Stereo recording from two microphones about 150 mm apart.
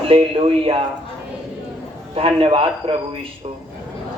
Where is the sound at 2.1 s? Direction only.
40° right (ahead or behind).